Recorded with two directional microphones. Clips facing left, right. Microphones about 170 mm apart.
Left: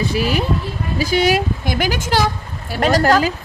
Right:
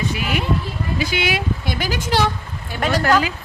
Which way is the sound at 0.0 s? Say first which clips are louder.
Left 4 dB; 35° left (ahead or behind).